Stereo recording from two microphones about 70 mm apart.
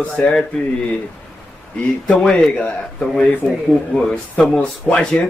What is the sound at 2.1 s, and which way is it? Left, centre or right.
Speech, centre.